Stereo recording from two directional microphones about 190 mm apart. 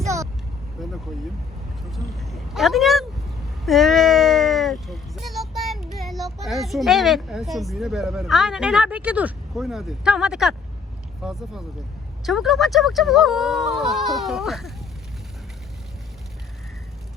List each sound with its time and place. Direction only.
0.0 s vehicle: 15° right (ahead or behind)
0.8 s speech: centre (ahead or behind)